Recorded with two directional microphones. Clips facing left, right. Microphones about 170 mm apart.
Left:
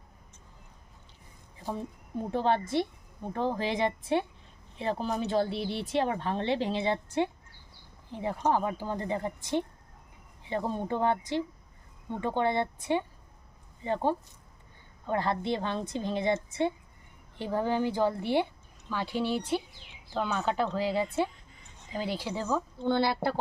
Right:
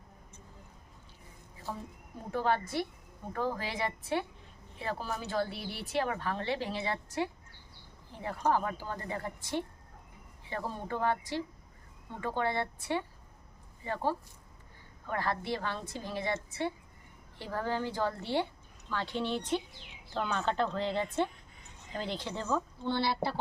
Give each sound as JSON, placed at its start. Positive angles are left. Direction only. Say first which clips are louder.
{"t": 1.6, "sound": "speech", "louder": "left 5 dB", "side_deg": 15}
{"t": 2.3, "sound": "a woman's voice", "louder": "left 3 dB", "side_deg": 25}
{"t": 22.8, "sound": "speech", "louder": "left 4 dB", "side_deg": 50}